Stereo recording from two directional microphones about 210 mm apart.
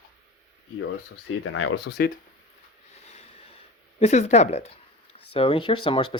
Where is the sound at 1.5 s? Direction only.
60° left (ahead or behind).